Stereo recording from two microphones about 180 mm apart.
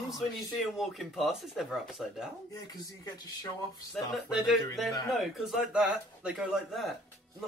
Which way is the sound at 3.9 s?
Centre (ahead or behind).